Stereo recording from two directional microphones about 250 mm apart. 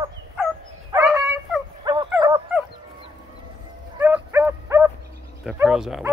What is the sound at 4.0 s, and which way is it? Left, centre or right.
Dog, centre.